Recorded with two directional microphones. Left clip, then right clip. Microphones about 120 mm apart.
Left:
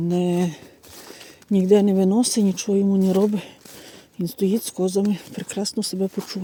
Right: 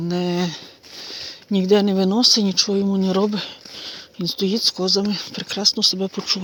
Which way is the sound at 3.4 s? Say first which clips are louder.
Right 9 dB; 35° left (ahead or behind).